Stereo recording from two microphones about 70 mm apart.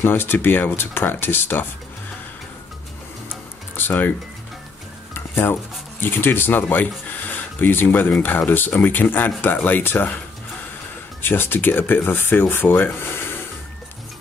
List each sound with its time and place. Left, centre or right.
0.0 s speech: left
3.7 s music: left
5.1 s dishes: left
6.0 s speech: left
11.2 s speech: left